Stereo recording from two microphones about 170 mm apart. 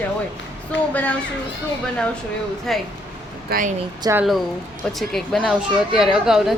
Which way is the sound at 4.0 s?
15° right (ahead or behind).